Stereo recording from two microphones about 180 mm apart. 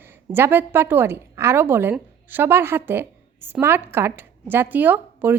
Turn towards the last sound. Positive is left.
turn(degrees=-10)  # may be behind; listen again after turning